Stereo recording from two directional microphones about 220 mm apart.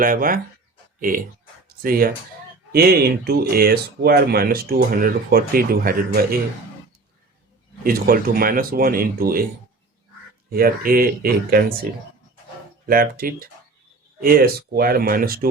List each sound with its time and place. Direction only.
0.0 s speech: 40° right (ahead or behind)
7.9 s speech: 40° right (ahead or behind)
10.5 s speech: 40° right (ahead or behind)
12.9 s speech: 40° right (ahead or behind)